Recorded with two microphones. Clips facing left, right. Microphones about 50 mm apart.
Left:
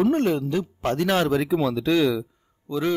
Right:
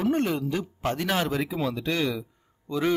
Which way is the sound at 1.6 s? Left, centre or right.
Left.